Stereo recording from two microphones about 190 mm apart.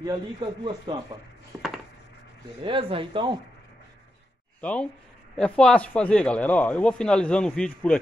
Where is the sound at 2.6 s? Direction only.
25° right (ahead or behind).